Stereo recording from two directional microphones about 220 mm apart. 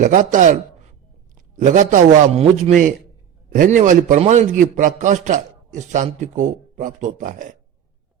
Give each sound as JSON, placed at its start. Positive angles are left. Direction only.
{"t": 0.0, "sound": "a man's voice", "side_deg": -35}
{"t": 1.5, "sound": "a man's voice", "side_deg": -35}